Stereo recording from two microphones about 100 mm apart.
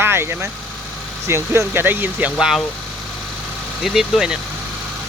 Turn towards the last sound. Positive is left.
turn(degrees=-5)  # may be behind; listen again after turning